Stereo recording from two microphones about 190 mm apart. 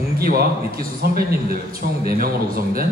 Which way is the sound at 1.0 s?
50° right (ahead or behind).